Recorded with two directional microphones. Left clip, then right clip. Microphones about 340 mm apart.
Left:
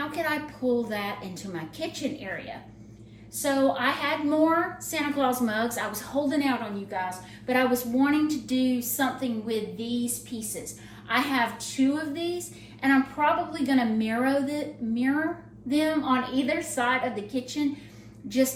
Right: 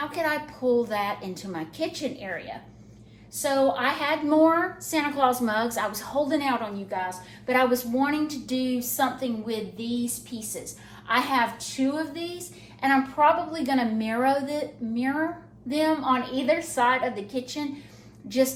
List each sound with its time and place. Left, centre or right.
0.1 s a woman's voice: centre